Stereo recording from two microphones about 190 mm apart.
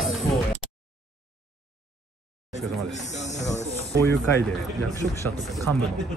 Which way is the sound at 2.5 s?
40° left (ahead or behind).